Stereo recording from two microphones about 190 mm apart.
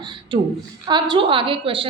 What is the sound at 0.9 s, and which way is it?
A woman's voice, 25° right (ahead or behind).